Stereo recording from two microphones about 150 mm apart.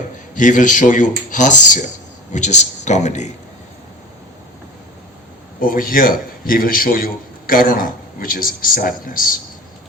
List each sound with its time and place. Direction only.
0.3 s speech: 55° left (ahead or behind)
5.5 s a man's voice: 65° left (ahead or behind)